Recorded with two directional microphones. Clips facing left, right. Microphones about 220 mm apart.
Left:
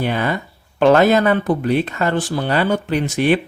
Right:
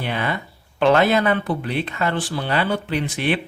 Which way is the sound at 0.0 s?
40° left (ahead or behind).